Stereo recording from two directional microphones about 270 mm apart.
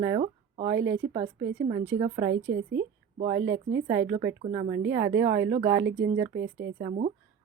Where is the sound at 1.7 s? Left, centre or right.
Centre.